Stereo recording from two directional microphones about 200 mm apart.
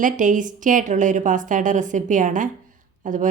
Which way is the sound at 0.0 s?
40° right (ahead or behind).